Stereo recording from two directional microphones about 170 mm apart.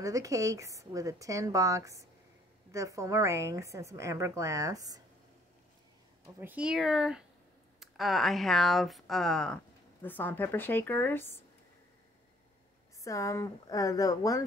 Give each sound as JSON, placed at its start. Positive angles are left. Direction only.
{"t": 0.0, "sound": "a woman's voice", "side_deg": -20}
{"t": 6.2, "sound": "speech", "side_deg": -5}
{"t": 13.0, "sound": "speech", "side_deg": 20}